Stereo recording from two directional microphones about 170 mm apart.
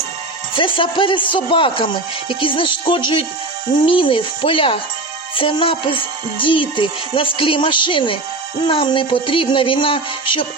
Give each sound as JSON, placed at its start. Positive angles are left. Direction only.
{"t": 0.5, "sound": "speech", "side_deg": 30}